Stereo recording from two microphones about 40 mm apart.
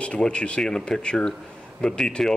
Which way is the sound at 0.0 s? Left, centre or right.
Left.